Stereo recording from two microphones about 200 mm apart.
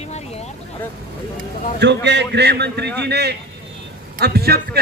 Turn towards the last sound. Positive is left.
turn(degrees=-50)  # may be behind; listen again after turning